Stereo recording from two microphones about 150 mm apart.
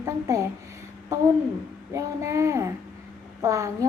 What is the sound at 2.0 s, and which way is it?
A woman's voice, 20° right (ahead or behind).